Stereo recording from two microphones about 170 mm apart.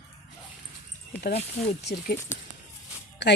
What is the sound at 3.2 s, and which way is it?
Speech, 90° left.